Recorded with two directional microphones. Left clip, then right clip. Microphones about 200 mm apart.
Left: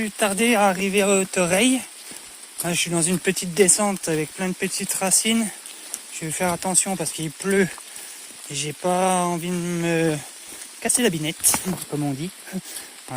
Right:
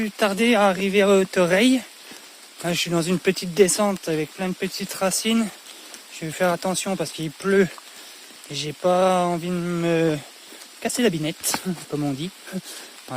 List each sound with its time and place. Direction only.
0.0 s speech: 25° right (ahead or behind)